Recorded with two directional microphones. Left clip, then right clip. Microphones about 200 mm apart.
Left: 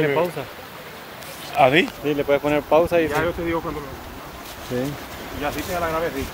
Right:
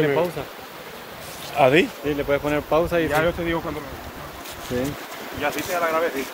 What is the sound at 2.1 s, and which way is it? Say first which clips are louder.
Speech: left 2 dB; 35° left (ahead or behind).